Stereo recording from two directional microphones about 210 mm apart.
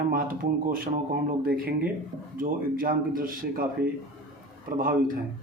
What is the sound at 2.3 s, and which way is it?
Speech, 40° right (ahead or behind).